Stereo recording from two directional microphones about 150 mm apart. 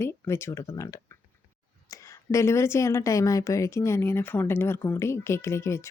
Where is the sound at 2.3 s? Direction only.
20° left (ahead or behind).